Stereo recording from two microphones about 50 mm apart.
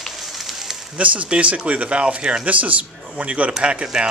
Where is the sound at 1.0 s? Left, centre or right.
Right.